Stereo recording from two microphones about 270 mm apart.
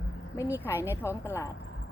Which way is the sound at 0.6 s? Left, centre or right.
Centre.